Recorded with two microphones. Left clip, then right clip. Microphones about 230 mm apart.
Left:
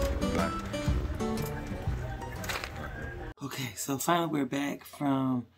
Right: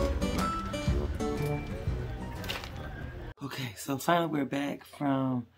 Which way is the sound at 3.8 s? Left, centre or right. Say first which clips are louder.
Right 1 dB; centre.